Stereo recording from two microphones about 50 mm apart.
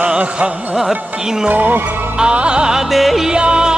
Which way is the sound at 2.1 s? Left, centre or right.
Centre.